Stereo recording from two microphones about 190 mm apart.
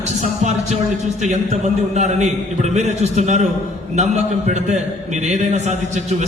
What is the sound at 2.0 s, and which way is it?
A man's voice, 35° right (ahead or behind).